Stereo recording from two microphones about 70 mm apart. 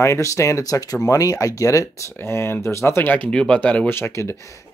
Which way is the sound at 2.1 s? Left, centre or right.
Left.